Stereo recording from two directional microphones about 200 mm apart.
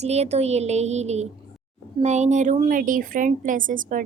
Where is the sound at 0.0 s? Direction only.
35° right (ahead or behind).